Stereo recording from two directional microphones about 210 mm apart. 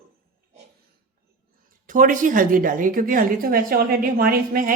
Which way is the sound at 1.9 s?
40° right (ahead or behind).